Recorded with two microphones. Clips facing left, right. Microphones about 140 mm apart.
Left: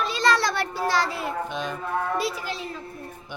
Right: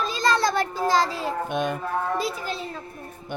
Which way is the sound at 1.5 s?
55° right (ahead or behind).